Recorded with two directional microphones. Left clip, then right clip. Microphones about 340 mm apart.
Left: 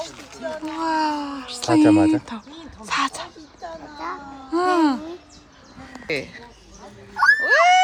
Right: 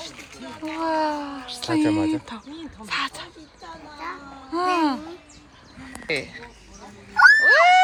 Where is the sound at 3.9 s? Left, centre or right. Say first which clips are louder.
Left 2 dB; left.